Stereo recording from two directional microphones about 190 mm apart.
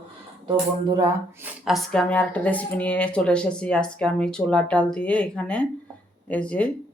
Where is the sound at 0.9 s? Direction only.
15° right (ahead or behind).